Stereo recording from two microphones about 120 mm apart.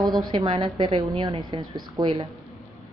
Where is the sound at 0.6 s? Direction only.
45° right (ahead or behind).